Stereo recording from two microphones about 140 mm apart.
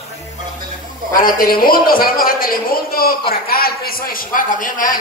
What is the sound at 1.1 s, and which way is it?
A man's voice, 85° left.